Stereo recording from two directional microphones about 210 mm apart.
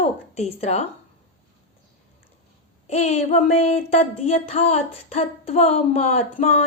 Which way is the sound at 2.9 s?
30° left (ahead or behind).